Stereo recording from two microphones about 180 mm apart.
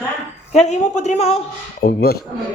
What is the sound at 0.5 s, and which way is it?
Speech, 40° left (ahead or behind).